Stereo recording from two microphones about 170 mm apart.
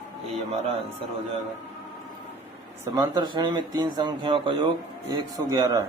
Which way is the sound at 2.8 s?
20° right (ahead or behind).